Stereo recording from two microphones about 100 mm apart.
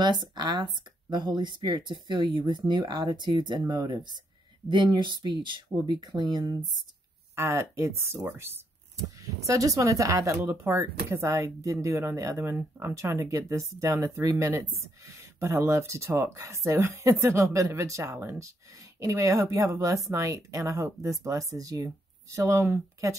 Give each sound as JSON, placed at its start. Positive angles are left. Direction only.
{"t": 0.0, "sound": "speech", "side_deg": -50}
{"t": 7.3, "sound": "a woman's voice", "side_deg": -25}
{"t": 9.2, "sound": "a woman's voice", "side_deg": -35}